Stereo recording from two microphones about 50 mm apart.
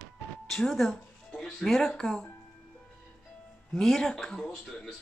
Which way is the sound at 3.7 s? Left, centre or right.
Centre.